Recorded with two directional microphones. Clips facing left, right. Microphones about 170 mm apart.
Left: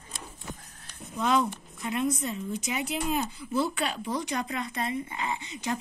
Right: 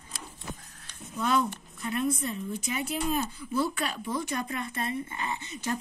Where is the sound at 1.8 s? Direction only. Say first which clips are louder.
Even; 20° left (ahead or behind).